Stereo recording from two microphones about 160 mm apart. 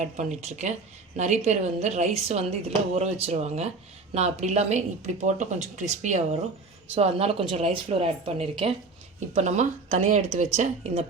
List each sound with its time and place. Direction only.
0.0 s a woman's voice: 45° right (ahead or behind)